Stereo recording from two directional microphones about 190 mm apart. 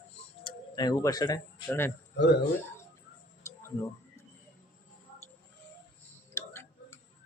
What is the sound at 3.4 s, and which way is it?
Tick-tock, 15° left (ahead or behind).